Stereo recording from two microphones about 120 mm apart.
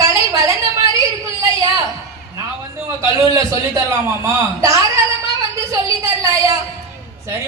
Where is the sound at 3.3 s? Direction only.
25° right (ahead or behind).